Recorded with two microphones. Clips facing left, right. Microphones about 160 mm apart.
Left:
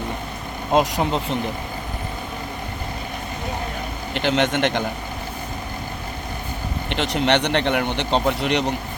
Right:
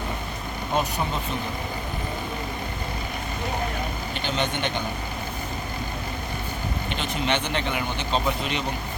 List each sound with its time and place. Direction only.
0.7 s speech: 90° left
4.1 s speech: 90° left
6.9 s speech: 80° left